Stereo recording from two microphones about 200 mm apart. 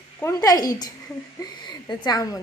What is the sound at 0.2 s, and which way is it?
A woman's voice, 15° left (ahead or behind).